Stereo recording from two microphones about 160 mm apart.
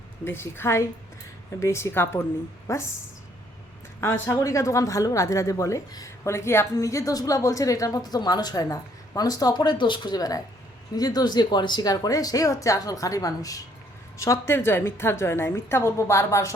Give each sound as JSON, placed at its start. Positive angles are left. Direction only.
{"t": 0.3, "sound": "a woman's voice", "side_deg": 15}
{"t": 4.0, "sound": "a woman's voice", "side_deg": 15}